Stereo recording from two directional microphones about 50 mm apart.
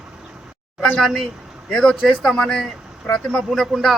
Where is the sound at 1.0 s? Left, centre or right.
Centre.